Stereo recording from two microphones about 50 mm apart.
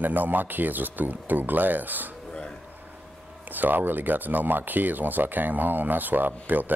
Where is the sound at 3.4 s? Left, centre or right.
Right.